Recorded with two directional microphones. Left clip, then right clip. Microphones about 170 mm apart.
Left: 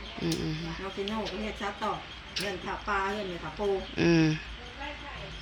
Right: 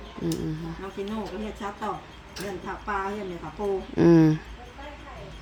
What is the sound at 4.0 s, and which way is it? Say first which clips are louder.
Speech: right 8 dB; 40° right (ahead or behind).